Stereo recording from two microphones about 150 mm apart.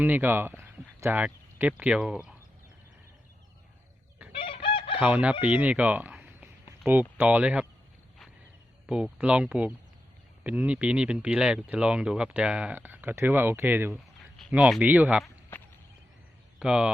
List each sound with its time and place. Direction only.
0.0 s speech: 10° right (ahead or behind)
4.3 s chicken: 35° left (ahead or behind)
4.9 s speech: 10° right (ahead or behind)
8.9 s speech: 5° right (ahead or behind)
15.2 s a sound: 15° left (ahead or behind)
16.6 s speech: 5° right (ahead or behind)